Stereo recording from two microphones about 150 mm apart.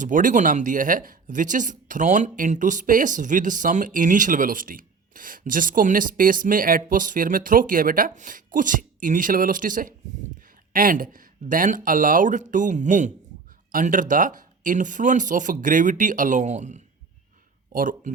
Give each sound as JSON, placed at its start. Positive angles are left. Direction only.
{"t": 0.0, "sound": "speech", "side_deg": -60}
{"t": 17.7, "sound": "speech", "side_deg": -65}